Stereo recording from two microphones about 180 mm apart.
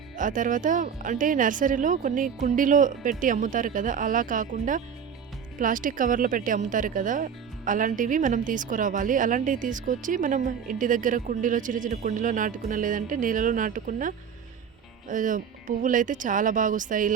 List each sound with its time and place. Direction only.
0.2 s speech: 45° right (ahead or behind)
15.1 s speech: 45° right (ahead or behind)